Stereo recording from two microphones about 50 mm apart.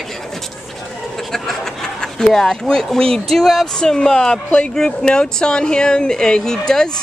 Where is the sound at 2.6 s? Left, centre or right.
Centre.